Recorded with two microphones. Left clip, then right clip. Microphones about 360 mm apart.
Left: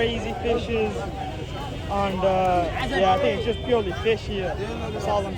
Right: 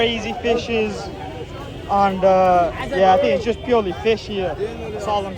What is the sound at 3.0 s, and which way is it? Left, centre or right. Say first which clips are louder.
Speech: right 7 dB; centre.